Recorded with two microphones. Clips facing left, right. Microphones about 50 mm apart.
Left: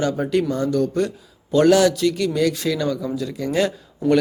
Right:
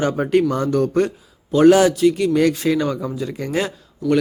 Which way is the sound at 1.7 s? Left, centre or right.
Right.